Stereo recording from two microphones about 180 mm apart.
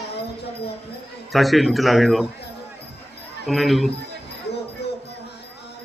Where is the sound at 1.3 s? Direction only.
Centre (ahead or behind).